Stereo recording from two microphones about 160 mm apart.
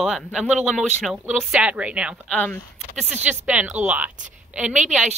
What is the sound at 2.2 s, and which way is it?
Speech, 10° left (ahead or behind).